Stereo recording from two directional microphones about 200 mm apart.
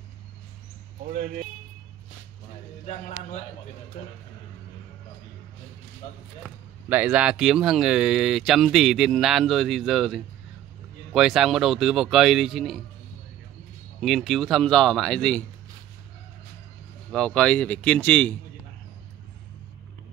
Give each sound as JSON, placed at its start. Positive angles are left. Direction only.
{"t": 2.9, "sound": "a man's voice", "side_deg": 35}
{"t": 6.4, "sound": "speech", "side_deg": -5}
{"t": 14.0, "sound": "speech", "side_deg": 0}
{"t": 17.1, "sound": "speech", "side_deg": 5}